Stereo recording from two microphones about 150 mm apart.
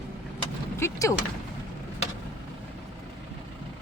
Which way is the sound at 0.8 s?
20° left (ahead or behind).